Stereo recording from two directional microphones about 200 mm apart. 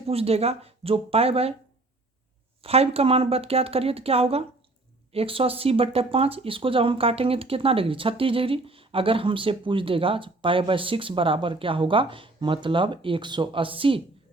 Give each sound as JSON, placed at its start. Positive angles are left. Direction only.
{"t": 0.1, "sound": "speech", "side_deg": -30}
{"t": 2.6, "sound": "speech", "side_deg": -30}